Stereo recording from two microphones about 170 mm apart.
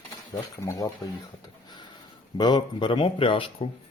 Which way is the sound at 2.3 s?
25° left (ahead or behind).